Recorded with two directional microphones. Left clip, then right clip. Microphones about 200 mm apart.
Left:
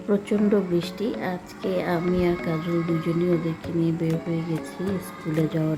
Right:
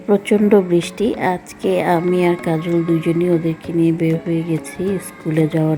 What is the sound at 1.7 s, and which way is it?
Speech, 25° right (ahead or behind).